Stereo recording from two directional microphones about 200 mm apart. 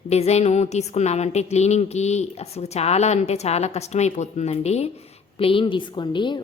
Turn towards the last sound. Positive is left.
turn(degrees=25)  # may be behind; listen again after turning